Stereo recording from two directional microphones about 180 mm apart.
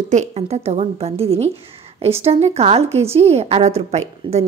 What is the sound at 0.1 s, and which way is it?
A woman's voice, 40° right (ahead or behind).